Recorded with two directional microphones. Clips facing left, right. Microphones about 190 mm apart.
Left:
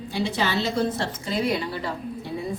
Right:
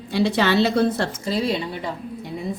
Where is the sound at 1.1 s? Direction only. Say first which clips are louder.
Right 2 dB; 35° right (ahead or behind); by 1.9 s 20° right (ahead or behind).